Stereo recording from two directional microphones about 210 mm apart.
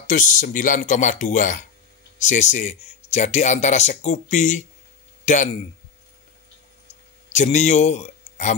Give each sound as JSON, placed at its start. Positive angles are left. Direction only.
{"t": 0.0, "sound": "speech", "side_deg": 40}
{"t": 7.2, "sound": "speech", "side_deg": 35}